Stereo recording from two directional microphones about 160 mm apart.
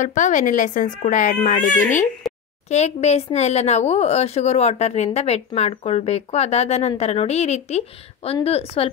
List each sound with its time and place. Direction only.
0.0 s speech: 50° left (ahead or behind)
2.3 s a sound: centre (ahead or behind)
2.7 s a woman's voice: 45° left (ahead or behind)